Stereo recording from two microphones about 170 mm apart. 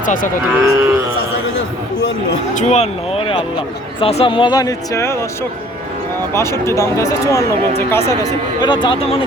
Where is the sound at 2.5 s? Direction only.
40° left (ahead or behind); by 5.1 s 20° left (ahead or behind).